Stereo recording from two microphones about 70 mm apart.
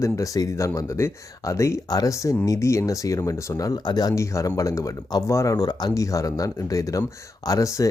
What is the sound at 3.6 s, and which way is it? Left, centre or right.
Speech, left.